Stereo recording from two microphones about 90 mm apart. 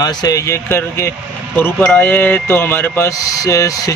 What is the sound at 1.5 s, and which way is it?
Mantra, 20° left (ahead or behind).